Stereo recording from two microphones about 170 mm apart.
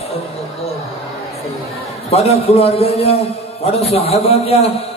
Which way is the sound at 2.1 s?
35° left (ahead or behind).